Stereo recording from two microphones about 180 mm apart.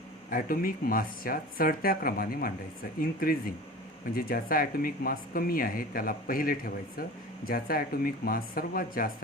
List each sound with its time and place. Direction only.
0.3 s speech: 50° left (ahead or behind)